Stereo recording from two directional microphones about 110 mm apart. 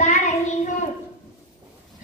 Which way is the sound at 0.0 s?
90° left.